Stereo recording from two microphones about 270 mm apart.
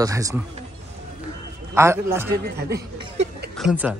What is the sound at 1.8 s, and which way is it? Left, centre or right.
Speech, centre.